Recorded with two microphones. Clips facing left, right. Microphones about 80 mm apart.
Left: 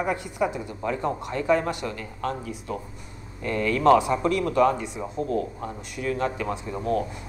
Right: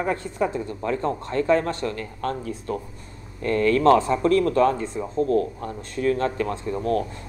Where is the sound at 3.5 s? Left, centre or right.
Left.